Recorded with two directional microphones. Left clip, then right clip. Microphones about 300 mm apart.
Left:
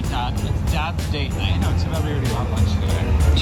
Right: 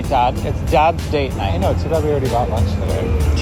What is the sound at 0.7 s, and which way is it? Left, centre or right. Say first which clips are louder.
Speech: right 13 dB; centre.